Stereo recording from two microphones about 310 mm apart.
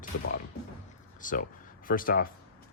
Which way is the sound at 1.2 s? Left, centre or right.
Left.